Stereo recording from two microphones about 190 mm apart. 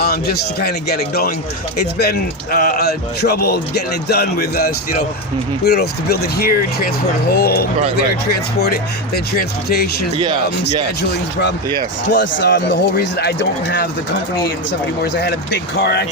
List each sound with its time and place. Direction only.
0.0 s a man's voice: 55° left (ahead or behind)
12.1 s a man's voice: 70° left (ahead or behind)
15.0 s a man's voice: 65° left (ahead or behind)